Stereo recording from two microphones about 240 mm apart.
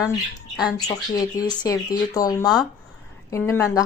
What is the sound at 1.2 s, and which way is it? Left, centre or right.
A woman's voice, centre.